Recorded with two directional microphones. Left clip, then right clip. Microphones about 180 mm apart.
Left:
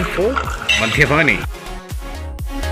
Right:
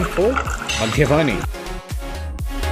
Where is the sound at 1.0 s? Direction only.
15° right (ahead or behind).